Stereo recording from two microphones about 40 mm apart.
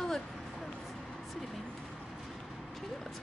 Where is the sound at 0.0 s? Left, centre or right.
Centre.